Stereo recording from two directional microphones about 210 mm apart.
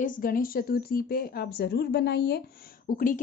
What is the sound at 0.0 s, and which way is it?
A woman's voice, 40° left (ahead or behind).